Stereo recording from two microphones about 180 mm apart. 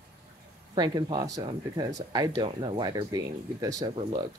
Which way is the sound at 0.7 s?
25° right (ahead or behind).